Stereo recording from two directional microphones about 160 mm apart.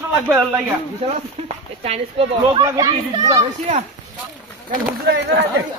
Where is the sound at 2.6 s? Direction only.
20° right (ahead or behind).